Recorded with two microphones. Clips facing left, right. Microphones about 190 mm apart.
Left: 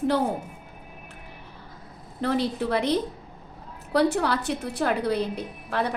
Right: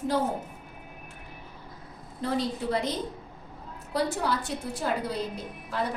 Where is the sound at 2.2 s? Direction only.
70° left (ahead or behind).